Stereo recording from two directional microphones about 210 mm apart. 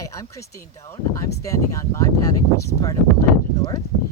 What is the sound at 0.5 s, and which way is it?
Speech, 15° left (ahead or behind).